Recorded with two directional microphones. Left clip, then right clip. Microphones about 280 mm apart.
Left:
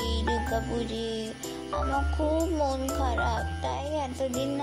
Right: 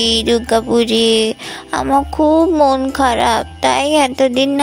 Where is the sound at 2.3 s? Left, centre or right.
Right.